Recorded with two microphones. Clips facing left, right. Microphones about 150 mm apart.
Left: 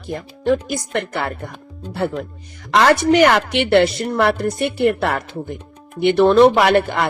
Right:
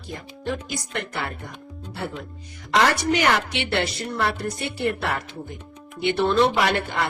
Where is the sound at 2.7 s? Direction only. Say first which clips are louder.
Left 7 dB; 70° left (ahead or behind).